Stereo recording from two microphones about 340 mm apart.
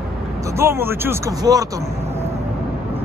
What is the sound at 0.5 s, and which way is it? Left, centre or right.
Speech, centre.